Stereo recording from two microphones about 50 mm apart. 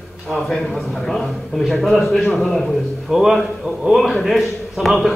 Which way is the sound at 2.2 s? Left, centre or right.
Centre.